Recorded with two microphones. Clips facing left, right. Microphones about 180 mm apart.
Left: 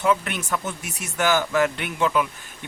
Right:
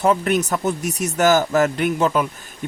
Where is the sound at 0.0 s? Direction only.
40° right (ahead or behind).